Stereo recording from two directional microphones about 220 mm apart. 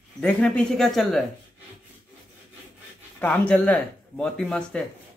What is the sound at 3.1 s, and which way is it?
Speech, 5° left (ahead or behind).